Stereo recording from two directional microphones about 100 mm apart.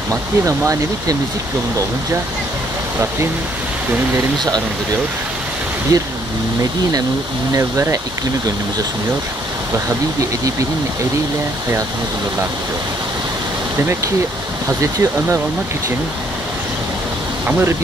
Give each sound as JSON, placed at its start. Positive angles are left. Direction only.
{"t": 0.1, "sound": "speech", "side_deg": -30}
{"t": 5.9, "sound": "speech", "side_deg": -35}
{"t": 7.5, "sound": "speech", "side_deg": -30}
{"t": 13.7, "sound": "speech", "side_deg": -25}
{"t": 17.5, "sound": "speech", "side_deg": -25}